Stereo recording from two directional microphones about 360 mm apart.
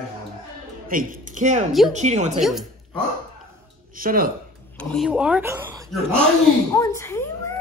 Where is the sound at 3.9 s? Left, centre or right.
Right.